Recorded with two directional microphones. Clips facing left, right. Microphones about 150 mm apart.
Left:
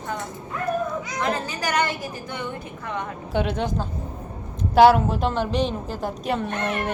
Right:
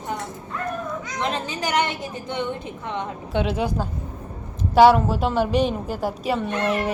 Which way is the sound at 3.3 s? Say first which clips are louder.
Right 1 dB; centre (ahead or behind).